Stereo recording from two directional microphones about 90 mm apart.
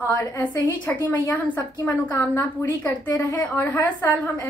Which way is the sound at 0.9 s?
20° left (ahead or behind).